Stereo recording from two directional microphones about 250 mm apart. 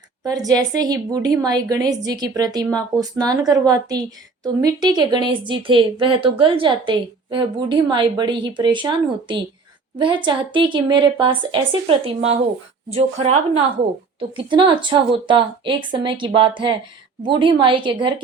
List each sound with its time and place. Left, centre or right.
0.3 s a woman's voice: centre